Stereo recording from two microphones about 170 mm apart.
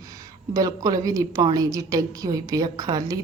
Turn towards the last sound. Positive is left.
turn(degrees=-25)  # may be behind; listen again after turning